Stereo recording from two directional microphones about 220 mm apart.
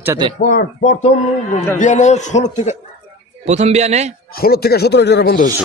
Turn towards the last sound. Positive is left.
turn(degrees=45)  # may be behind; listen again after turning